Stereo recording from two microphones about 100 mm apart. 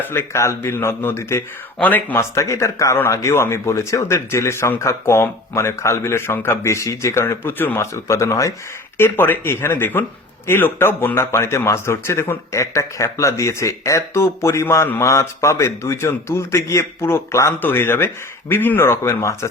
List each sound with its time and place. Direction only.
0.0 s speech: 25° left (ahead or behind)